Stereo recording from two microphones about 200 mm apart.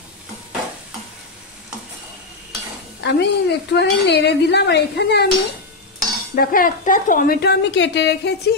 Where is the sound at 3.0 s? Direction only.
55° left (ahead or behind).